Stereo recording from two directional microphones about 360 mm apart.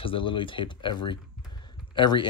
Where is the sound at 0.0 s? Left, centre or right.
Centre.